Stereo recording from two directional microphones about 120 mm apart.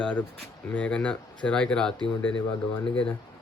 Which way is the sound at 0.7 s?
10° left (ahead or behind).